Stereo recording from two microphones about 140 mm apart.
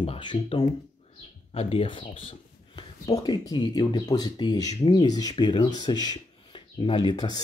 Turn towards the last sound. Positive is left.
turn(degrees=30)  # may be behind; listen again after turning